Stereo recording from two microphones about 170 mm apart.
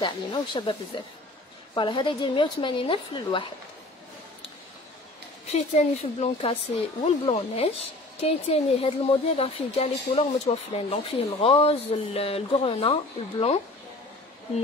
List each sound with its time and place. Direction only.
0.0 s a woman's voice: 25° left (ahead or behind)
5.5 s speech: 40° left (ahead or behind)